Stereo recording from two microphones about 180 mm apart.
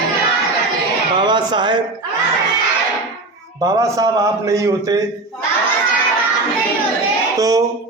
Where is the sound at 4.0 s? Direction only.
20° right (ahead or behind).